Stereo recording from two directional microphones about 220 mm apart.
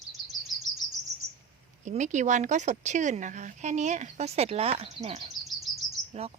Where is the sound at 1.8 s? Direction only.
35° right (ahead or behind).